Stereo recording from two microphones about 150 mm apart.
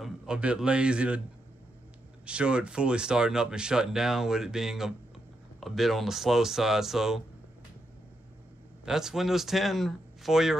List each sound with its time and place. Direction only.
0.0 s a man's voice: 5° right (ahead or behind)
2.2 s speech: 5° right (ahead or behind)
8.8 s speech: 5° right (ahead or behind)